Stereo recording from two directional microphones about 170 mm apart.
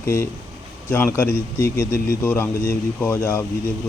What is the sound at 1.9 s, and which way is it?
Speech, 60° left (ahead or behind).